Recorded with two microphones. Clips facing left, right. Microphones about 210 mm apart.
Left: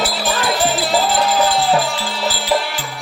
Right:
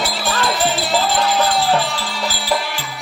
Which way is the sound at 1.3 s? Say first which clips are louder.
Left 2 dB; centre (ahead or behind).